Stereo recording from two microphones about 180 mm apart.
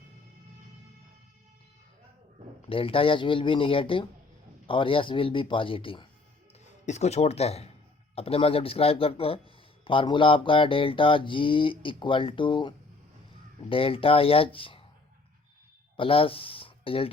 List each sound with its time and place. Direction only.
2.6 s mantra: 30° left (ahead or behind)
6.8 s speech: 40° left (ahead or behind)
9.8 s mantra: 25° left (ahead or behind)
16.0 s speech: 30° left (ahead or behind)